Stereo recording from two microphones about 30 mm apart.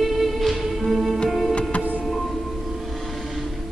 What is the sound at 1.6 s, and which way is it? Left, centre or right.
Music, left.